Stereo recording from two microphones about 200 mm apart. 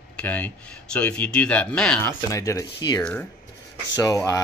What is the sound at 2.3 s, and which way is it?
Speech, 15° left (ahead or behind).